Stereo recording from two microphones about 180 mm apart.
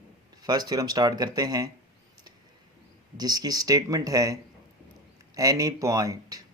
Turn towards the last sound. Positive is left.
turn(degrees=-20)  # may be behind; listen again after turning